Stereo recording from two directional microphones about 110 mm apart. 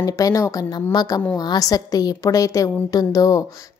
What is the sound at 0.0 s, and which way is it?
A woman's voice, 30° left (ahead or behind).